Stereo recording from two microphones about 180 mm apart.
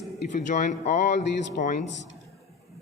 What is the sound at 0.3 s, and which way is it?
Speech, 45° left (ahead or behind).